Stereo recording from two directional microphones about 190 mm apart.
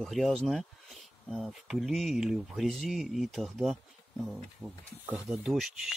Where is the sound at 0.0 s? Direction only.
Centre (ahead or behind).